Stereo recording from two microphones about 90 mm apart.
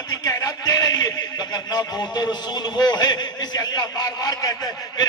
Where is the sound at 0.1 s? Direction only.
40° left (ahead or behind).